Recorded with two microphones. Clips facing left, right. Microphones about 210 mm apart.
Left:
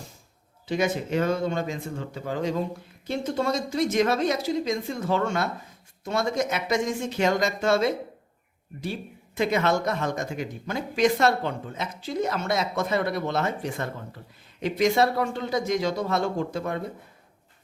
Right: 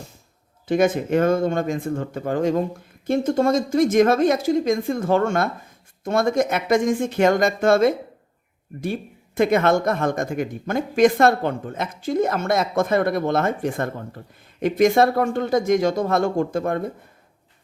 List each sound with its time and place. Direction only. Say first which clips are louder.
0.7 s speech: right 7 dB; 50° right (ahead or behind)